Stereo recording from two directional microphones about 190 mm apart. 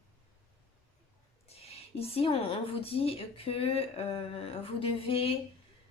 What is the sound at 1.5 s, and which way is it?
Speech, 30° left (ahead or behind).